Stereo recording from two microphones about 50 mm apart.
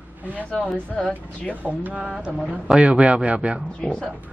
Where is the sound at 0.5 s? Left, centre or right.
Left.